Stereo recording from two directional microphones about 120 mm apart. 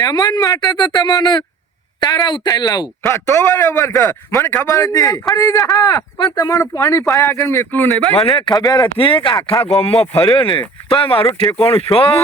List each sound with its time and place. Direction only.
0.0 s speech: 35° left (ahead or behind)
3.1 s a man's voice: 25° left (ahead or behind)
8.2 s speech: 45° left (ahead or behind)